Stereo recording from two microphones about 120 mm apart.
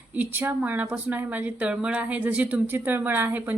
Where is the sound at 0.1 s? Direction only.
15° right (ahead or behind).